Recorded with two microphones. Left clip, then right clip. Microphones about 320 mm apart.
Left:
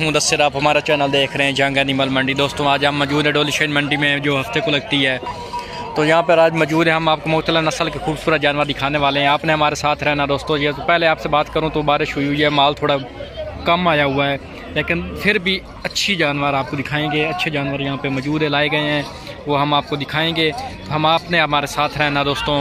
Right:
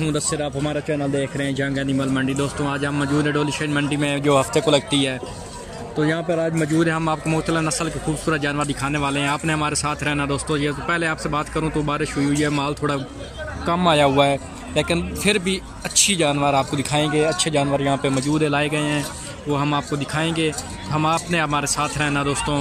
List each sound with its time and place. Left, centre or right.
0.4 s a man's voice: left
1.9 s a man's voice: centre
6.0 s speech: left
6.8 s a man's voice: centre